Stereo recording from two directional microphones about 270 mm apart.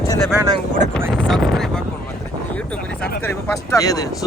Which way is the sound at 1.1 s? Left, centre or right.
Centre.